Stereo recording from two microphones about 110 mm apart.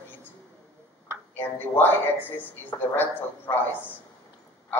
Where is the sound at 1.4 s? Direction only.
20° left (ahead or behind).